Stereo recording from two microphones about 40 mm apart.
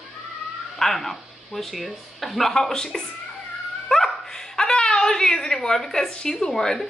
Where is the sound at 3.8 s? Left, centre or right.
Centre.